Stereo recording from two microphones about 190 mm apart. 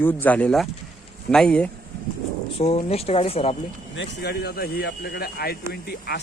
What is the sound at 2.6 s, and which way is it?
Speech, 30° left (ahead or behind).